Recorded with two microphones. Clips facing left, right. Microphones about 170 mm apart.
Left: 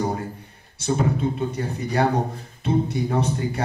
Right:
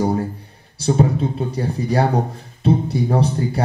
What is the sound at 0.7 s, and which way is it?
Speech, 35° right (ahead or behind).